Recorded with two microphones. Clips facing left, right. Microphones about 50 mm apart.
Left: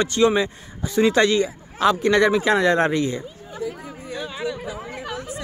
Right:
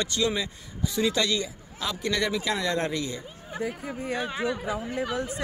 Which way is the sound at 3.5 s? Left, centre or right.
Right.